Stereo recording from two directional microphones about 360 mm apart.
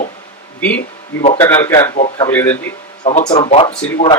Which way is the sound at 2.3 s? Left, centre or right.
Centre.